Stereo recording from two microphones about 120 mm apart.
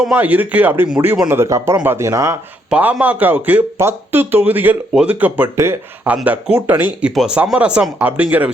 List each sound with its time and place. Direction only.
0.1 s speech: 15° right (ahead or behind)
1.4 s speech: 25° right (ahead or behind)
2.6 s speech: 10° right (ahead or behind)